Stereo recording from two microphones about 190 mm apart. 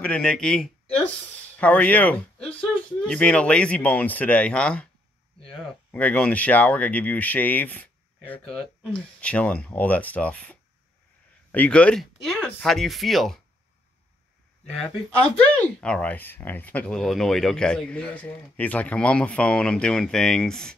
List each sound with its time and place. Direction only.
0.0 s speech: 5° left (ahead or behind)
14.7 s speech: 5° left (ahead or behind)